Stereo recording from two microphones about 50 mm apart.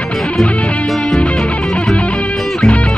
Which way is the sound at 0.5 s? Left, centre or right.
Left.